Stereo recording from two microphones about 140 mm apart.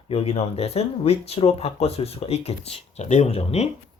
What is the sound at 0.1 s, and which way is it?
Speech, 45° left (ahead or behind).